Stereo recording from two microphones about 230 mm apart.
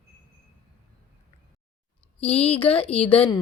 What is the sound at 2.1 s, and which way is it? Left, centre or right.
A woman's voice, left.